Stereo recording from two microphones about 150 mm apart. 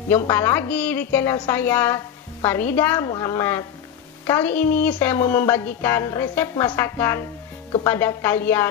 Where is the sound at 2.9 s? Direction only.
25° left (ahead or behind).